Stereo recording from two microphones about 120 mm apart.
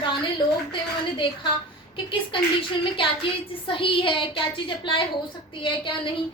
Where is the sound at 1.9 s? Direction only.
45° left (ahead or behind).